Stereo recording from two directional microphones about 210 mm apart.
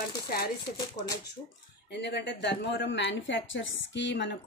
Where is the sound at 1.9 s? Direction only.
55° left (ahead or behind).